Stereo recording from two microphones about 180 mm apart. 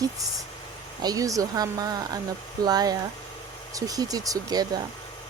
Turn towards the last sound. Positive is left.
turn(degrees=-20)  # may be behind; listen again after turning